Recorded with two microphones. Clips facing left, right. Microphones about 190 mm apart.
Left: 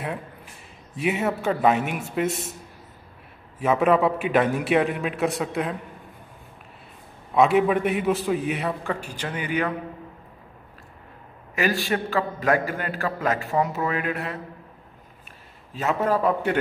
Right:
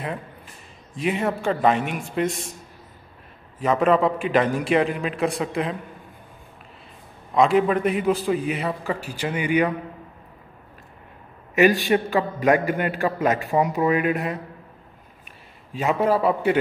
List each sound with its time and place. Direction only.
0.9 s a man's voice: 5° left (ahead or behind)
3.5 s a man's voice: 5° left (ahead or behind)
7.3 s a man's voice: 5° left (ahead or behind); by 9.8 s 15° right (ahead or behind)
11.5 s a man's voice: 20° right (ahead or behind)
15.7 s a man's voice: 10° right (ahead or behind)